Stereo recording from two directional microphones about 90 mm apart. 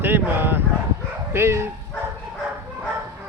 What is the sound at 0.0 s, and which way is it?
Dog, 25° right (ahead or behind).